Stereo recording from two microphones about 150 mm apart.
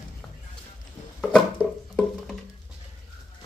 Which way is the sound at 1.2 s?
Centre (ahead or behind).